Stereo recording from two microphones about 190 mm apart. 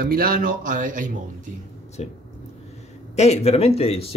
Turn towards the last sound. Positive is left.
turn(degrees=30)  # may be behind; listen again after turning